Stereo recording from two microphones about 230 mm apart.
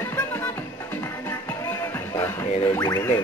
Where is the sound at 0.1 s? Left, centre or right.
Centre.